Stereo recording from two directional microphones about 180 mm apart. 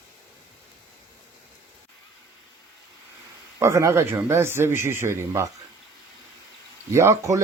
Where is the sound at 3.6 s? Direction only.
15° right (ahead or behind).